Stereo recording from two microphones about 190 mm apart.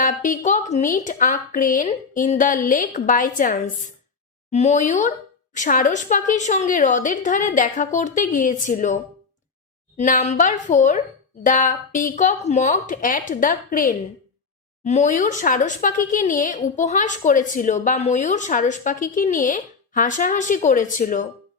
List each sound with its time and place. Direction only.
0.0 s a woman's voice: 40° left (ahead or behind)
10.0 s a woman's voice: 40° left (ahead or behind)